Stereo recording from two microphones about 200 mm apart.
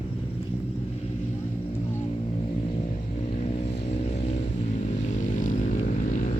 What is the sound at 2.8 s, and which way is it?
Vehicle, 35° left (ahead or behind).